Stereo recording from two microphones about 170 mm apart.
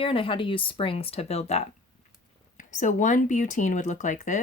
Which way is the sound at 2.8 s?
45° left (ahead or behind).